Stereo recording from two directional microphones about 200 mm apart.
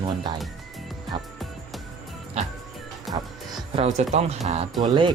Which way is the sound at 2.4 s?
30° right (ahead or behind).